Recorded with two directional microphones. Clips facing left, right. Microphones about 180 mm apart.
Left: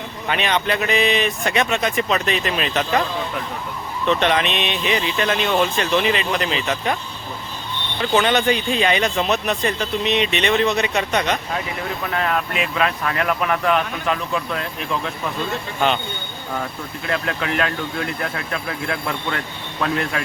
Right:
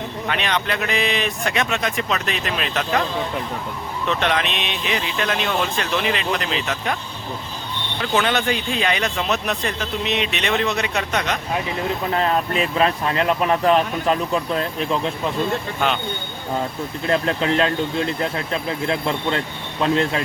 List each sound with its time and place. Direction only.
0.3 s speech: 5° left (ahead or behind)
4.0 s speech: centre (ahead or behind)
8.0 s speech: centre (ahead or behind)
12.0 s speech: 30° right (ahead or behind)
17.1 s speech: 30° right (ahead or behind)